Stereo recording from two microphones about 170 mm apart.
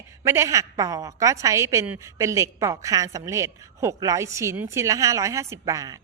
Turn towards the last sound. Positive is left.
turn(degrees=-20)  # may be behind; listen again after turning